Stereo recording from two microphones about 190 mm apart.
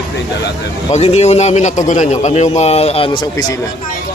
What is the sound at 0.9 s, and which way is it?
A man's voice, 35° left (ahead or behind).